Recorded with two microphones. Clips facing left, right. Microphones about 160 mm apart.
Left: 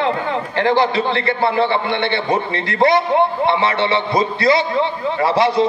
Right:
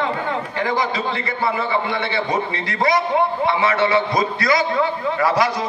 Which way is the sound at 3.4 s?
30° left (ahead or behind).